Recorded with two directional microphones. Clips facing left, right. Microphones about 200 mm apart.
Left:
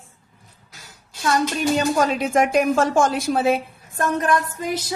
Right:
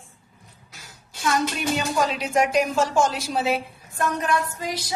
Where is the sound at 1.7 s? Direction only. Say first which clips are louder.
Left 5 dB; 45° left (ahead or behind).